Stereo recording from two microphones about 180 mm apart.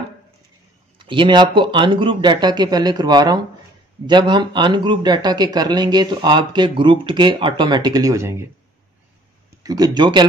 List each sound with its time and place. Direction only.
0.9 s speech: 25° right (ahead or behind)
9.6 s speech: 20° right (ahead or behind)